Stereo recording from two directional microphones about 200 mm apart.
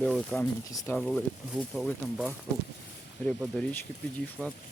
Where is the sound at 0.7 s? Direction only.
15° left (ahead or behind).